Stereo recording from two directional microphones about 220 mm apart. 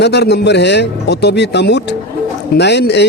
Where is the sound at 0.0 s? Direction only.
50° left (ahead or behind).